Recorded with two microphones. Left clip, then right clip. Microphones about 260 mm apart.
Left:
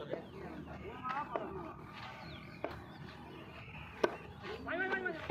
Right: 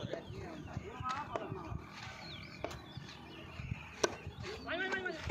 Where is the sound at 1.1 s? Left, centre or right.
Centre.